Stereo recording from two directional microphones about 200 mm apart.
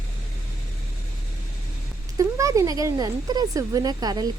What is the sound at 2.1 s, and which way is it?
A woman's voice, 15° right (ahead or behind).